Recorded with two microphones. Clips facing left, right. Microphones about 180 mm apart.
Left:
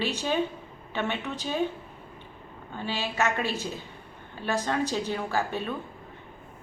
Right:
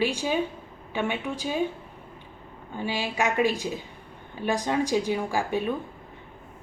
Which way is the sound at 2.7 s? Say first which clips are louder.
Right 3 dB; 15° right (ahead or behind).